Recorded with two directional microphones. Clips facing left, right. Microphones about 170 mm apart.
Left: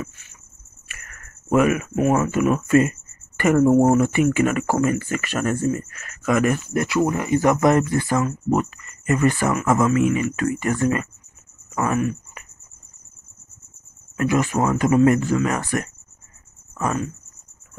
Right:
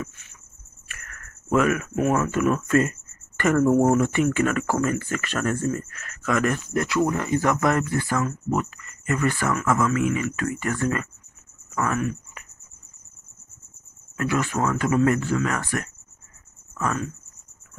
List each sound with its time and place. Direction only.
0.8 s speech: 10° left (ahead or behind)
11.7 s a sound: 15° left (ahead or behind)
14.1 s speech: 15° left (ahead or behind)